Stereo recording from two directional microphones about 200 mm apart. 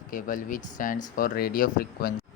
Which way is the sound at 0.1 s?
40° left (ahead or behind).